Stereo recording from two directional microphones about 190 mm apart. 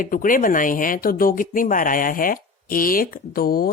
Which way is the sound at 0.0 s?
45° left (ahead or behind).